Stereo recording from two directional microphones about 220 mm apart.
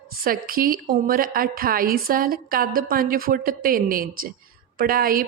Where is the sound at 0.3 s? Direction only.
40° right (ahead or behind).